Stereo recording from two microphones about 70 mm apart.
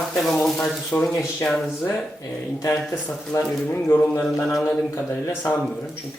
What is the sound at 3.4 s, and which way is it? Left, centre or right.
Speech, left.